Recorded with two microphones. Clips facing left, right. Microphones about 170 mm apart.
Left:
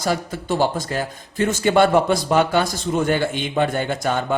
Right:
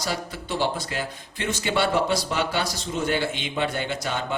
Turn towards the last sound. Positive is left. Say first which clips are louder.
# left 6 dB
turn(degrees=50)  # may be behind; listen again after turning